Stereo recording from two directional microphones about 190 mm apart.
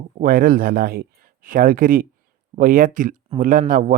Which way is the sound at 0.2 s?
50° right (ahead or behind).